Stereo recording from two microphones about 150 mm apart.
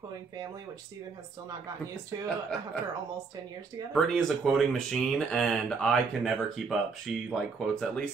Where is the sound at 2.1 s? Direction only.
25° right (ahead or behind).